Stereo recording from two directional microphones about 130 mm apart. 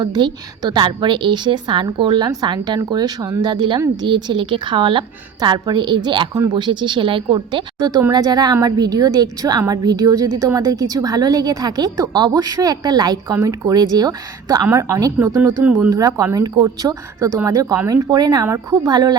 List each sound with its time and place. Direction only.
0.0 s a woman's voice: 35° right (ahead or behind)
15.6 s speech: 10° right (ahead or behind)
15.9 s a woman's voice: 25° right (ahead or behind)